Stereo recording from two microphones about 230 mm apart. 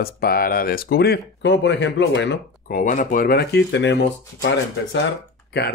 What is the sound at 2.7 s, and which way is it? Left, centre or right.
Speech, left.